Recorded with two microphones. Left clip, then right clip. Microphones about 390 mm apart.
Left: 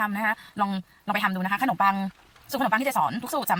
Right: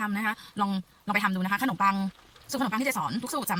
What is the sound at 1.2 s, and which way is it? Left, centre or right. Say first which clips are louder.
A woman's voice: left 3 dB; centre.